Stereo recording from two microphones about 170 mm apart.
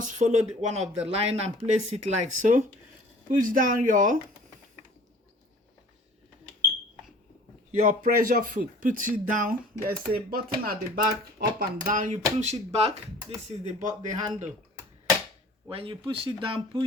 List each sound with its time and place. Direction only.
0.0 s speech: 45° right (ahead or behind)
7.9 s speech: 50° right (ahead or behind)
15.7 s speech: 30° right (ahead or behind)